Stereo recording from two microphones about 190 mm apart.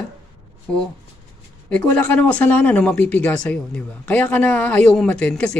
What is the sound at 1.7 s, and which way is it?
A woman's voice, 5° left (ahead or behind).